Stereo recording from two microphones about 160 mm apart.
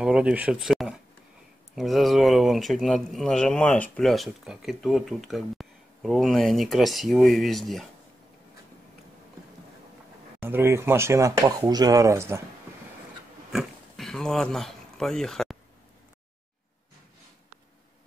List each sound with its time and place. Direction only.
0.0 s speech: 5° right (ahead or behind)
10.4 s speech: 15° right (ahead or behind)
13.5 s a sound: centre (ahead or behind)